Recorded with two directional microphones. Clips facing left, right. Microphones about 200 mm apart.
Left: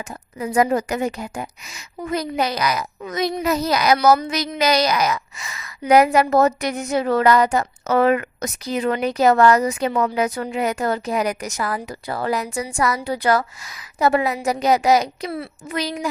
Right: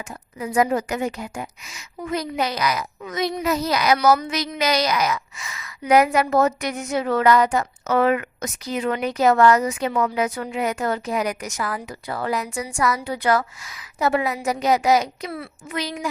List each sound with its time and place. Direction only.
0.3 s a woman's voice: 40° left (ahead or behind)